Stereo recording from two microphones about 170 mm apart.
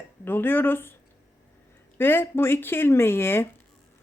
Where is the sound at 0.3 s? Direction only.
10° left (ahead or behind).